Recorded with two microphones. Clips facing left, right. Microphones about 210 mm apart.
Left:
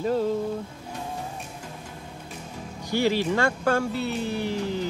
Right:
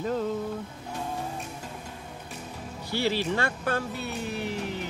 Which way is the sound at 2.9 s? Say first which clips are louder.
Left 4 dB; 15° left (ahead or behind).